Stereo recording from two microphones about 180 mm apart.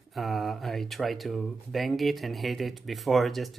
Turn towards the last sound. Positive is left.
turn(degrees=0)  # may be behind; listen again after turning